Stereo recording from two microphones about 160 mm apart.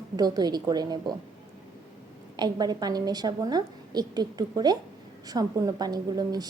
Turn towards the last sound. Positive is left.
turn(degrees=-25)  # may be behind; listen again after turning